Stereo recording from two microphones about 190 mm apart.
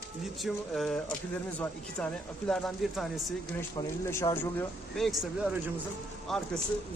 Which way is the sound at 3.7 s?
15° left (ahead or behind).